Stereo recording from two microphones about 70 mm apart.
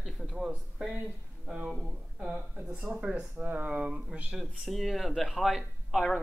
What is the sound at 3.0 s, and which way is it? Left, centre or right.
Speech, centre.